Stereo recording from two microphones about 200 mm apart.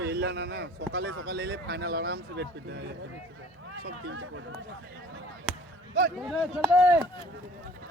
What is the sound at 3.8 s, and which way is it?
Speech, 70° right (ahead or behind).